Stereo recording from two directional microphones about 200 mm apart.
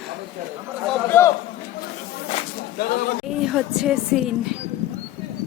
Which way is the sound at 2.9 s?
45° left (ahead or behind).